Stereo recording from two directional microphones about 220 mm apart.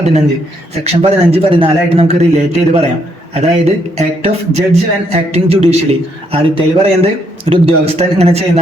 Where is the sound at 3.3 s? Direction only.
30° right (ahead or behind).